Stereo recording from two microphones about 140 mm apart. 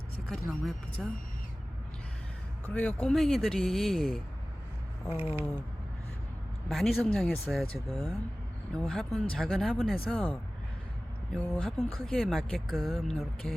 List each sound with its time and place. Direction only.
0.3 s speech: centre (ahead or behind)
2.6 s speech: 10° left (ahead or behind)
5.0 s a sound: 15° right (ahead or behind)
6.7 s speech: centre (ahead or behind)
11.5 s speech: 5° left (ahead or behind)